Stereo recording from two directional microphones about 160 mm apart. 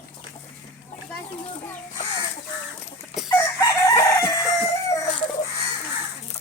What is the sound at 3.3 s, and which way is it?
Chicken, 20° left (ahead or behind).